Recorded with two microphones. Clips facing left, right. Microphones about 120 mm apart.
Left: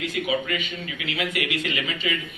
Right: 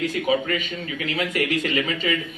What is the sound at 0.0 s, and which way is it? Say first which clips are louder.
A man's voice: right 4 dB; 40° right (ahead or behind).